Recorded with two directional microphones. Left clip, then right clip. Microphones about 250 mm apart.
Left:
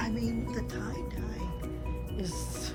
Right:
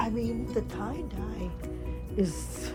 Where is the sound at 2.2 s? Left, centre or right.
Right.